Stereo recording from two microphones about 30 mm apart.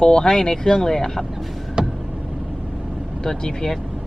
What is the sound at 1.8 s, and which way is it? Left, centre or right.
Vehicle, right.